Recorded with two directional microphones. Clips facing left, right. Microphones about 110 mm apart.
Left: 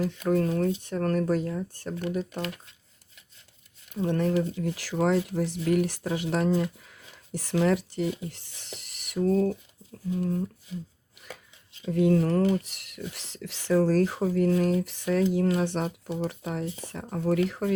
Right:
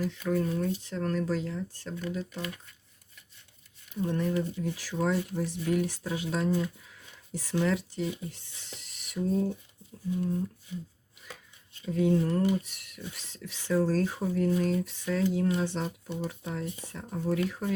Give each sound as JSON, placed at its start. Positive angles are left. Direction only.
{"t": 0.1, "sound": "speech", "side_deg": 60}
{"t": 0.8, "sound": "speech", "side_deg": 55}
{"t": 2.0, "sound": "speech", "side_deg": 65}
{"t": 3.9, "sound": "speech", "side_deg": 75}
{"t": 11.9, "sound": "speech", "side_deg": 75}